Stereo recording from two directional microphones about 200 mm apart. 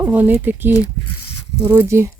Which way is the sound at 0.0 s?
10° right (ahead or behind).